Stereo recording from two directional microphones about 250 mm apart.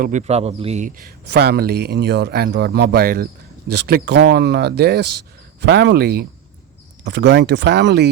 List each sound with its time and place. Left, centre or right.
0.0 s speech: right
1.2 s speech: right